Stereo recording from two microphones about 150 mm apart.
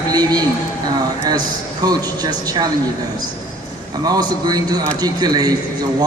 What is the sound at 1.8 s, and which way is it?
Speech, 25° right (ahead or behind).